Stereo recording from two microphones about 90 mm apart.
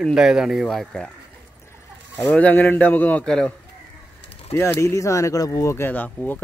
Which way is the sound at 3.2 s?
10° left (ahead or behind).